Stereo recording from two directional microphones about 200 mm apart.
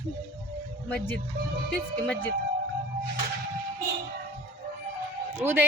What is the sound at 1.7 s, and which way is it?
Speech, 5° left (ahead or behind).